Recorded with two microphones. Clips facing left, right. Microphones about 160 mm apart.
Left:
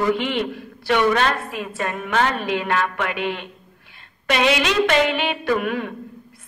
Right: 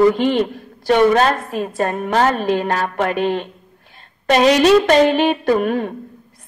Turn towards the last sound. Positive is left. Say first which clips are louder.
# right 5 dB
turn(degrees=-40)  # may be behind; listen again after turning